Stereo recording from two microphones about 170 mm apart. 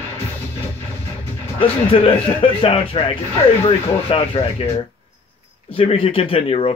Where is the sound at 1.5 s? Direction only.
30° left (ahead or behind).